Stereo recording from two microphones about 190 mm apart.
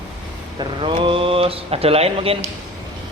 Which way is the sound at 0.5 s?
25° right (ahead or behind).